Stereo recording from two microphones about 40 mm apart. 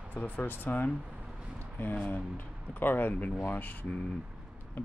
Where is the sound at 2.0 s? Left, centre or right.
Left.